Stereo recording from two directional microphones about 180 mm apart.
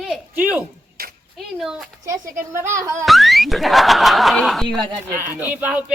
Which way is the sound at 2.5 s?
15° right (ahead or behind).